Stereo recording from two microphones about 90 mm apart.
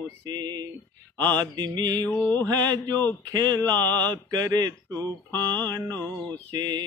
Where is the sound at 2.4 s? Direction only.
50° right (ahead or behind).